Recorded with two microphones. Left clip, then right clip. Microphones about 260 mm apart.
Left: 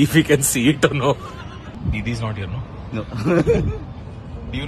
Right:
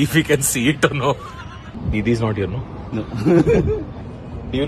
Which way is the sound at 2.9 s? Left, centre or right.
Left.